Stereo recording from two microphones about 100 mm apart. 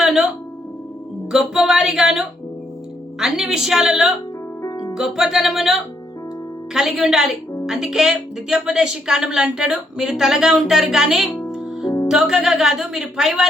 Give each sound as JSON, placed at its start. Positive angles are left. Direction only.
{"t": 0.0, "sound": "music", "side_deg": -5}
{"t": 1.3, "sound": "speech", "side_deg": -5}
{"t": 4.6, "sound": "music", "side_deg": 35}
{"t": 4.9, "sound": "speech", "side_deg": -5}
{"t": 11.4, "sound": "music", "side_deg": -5}
{"t": 12.0, "sound": "speech", "side_deg": -5}